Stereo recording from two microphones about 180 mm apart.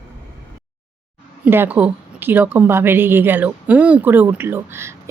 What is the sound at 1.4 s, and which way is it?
Speech, 10° right (ahead or behind).